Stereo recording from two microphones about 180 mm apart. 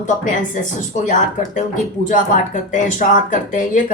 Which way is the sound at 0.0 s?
45° left (ahead or behind).